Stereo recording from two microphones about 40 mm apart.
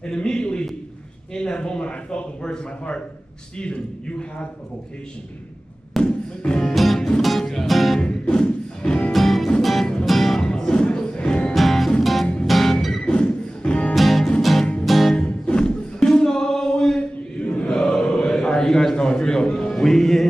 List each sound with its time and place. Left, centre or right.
0.0 s a man's voice: centre
6.0 s music: left
6.7 s music: centre
8.0 s music: centre
9.1 s music: centre
10.4 s music: centre
11.5 s music: centre
13.0 s music: left
13.9 s music: centre
15.1 s music: left
17.6 s chant: centre
19.7 s music: centre